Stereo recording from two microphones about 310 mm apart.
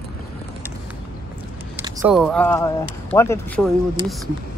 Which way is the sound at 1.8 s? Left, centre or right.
Centre.